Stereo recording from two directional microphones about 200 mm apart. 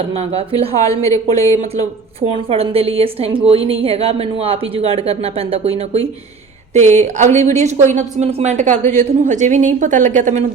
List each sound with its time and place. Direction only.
0.1 s speech: 30° right (ahead or behind)
0.8 s speech: 15° left (ahead or behind)
2.5 s speech: 30° right (ahead or behind)